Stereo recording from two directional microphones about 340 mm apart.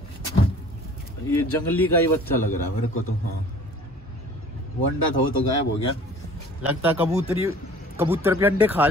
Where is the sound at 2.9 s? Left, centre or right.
Left.